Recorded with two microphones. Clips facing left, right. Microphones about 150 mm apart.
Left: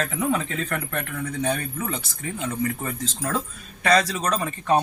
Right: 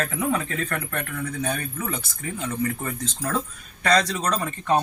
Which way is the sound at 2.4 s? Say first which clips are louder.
Even; 10° left (ahead or behind).